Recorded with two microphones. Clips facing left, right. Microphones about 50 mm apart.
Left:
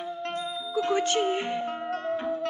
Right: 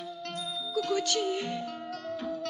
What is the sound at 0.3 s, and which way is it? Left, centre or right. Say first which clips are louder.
Music: left 1 dB; left.